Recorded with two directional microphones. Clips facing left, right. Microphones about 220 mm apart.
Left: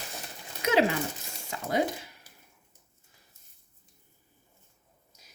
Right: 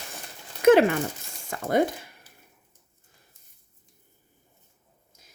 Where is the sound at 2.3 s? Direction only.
10° left (ahead or behind).